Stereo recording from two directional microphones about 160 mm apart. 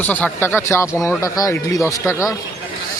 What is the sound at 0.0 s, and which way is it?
Speech, 10° left (ahead or behind).